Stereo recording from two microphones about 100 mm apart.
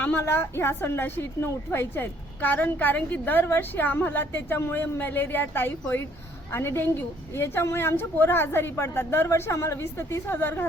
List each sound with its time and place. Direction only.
0.0 s a woman's voice: 20° left (ahead or behind)